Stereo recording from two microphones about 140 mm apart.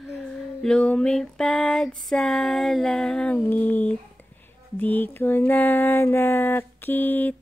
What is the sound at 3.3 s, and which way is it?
Mantra, 15° left (ahead or behind).